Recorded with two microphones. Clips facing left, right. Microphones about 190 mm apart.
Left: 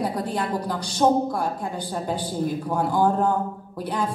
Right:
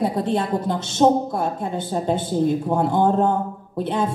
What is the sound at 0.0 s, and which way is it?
A woman's voice, 25° right (ahead or behind).